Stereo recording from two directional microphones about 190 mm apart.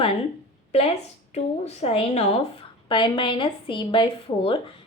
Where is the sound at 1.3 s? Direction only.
35° left (ahead or behind).